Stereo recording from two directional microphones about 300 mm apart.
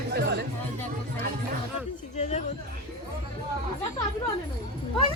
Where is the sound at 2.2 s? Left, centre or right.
Left.